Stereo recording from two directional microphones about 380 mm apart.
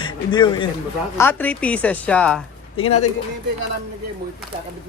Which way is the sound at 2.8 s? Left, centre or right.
Left.